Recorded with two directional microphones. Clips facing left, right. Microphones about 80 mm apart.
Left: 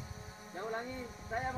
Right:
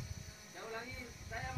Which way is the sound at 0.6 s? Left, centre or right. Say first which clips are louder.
Left 7 dB; left.